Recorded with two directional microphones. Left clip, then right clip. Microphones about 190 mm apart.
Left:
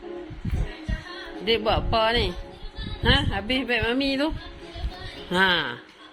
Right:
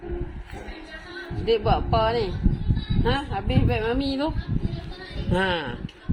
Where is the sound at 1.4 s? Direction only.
20° left (ahead or behind).